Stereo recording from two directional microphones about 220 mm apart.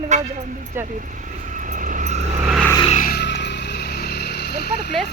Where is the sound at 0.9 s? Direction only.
35° right (ahead or behind).